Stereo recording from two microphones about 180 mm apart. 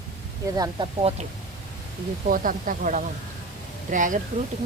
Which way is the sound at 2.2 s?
50° right (ahead or behind).